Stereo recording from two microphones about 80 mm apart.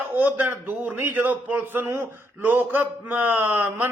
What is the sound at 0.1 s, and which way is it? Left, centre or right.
A man's voice, right.